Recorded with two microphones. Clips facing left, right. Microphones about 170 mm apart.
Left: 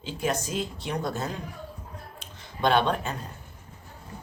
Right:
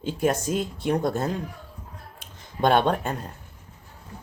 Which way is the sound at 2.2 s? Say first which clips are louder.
Right 3 dB; 50° right (ahead or behind).